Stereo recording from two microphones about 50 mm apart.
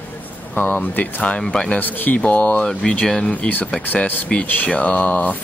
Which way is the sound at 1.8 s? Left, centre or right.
Left.